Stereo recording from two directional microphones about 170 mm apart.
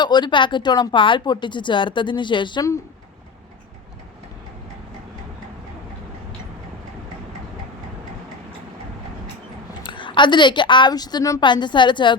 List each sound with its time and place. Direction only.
0.0 s a woman's voice: 25° left (ahead or behind)
9.8 s a woman's voice: 30° left (ahead or behind)